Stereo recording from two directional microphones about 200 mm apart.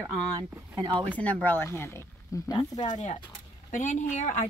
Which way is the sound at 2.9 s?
35° left (ahead or behind).